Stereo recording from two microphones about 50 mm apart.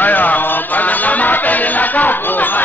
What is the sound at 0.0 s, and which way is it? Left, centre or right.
Music, left.